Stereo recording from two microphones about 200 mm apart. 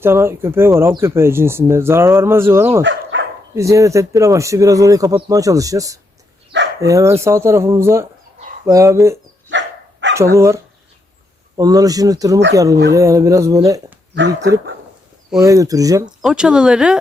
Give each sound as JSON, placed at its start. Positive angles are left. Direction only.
{"t": 0.0, "sound": "speech", "side_deg": -10}
{"t": 2.8, "sound": "dog", "side_deg": -60}
{"t": 3.5, "sound": "speech", "side_deg": -15}
{"t": 9.5, "sound": "dog", "side_deg": -65}
{"t": 10.2, "sound": "speech", "side_deg": -15}
{"t": 14.2, "sound": "speech", "side_deg": -60}
{"t": 15.4, "sound": "speech", "side_deg": -15}
{"t": 16.2, "sound": "speech", "side_deg": -5}